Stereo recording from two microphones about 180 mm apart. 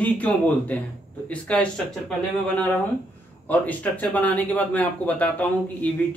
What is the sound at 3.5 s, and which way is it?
A man's voice, 10° left (ahead or behind).